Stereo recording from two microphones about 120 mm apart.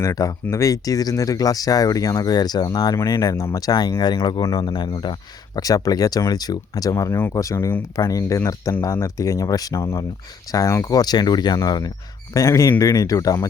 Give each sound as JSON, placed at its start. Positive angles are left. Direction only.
{"t": 0.0, "sound": "speech", "side_deg": 30}